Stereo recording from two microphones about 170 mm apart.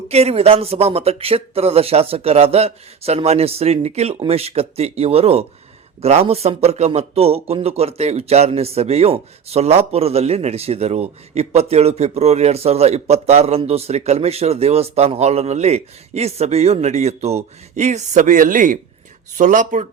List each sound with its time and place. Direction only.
0.1 s speech: 35° right (ahead or behind)